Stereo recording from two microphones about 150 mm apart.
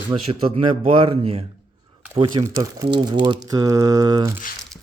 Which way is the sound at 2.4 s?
20° right (ahead or behind).